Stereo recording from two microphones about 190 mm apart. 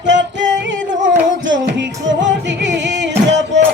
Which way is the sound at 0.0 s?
70° right (ahead or behind).